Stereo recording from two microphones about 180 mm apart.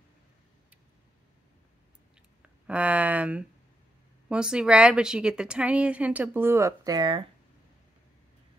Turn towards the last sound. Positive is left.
turn(degrees=-25)  # may be behind; listen again after turning